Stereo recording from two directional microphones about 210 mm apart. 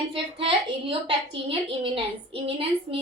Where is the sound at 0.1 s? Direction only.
25° right (ahead or behind).